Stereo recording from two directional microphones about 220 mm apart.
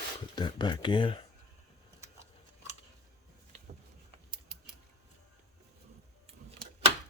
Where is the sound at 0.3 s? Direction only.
20° left (ahead or behind).